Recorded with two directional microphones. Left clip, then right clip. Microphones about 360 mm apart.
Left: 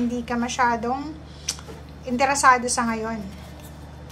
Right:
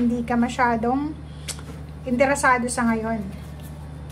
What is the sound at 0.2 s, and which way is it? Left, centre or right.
A woman's voice, centre.